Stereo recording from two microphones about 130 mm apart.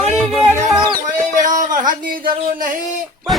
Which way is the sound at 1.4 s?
85° right.